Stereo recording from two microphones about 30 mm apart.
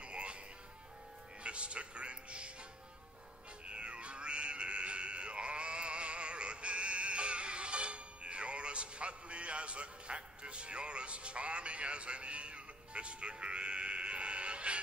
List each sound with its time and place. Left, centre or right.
0.0 s music: right
1.4 s music: right
3.6 s music: right